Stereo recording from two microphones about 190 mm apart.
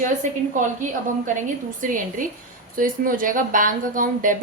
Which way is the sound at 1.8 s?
45° right (ahead or behind).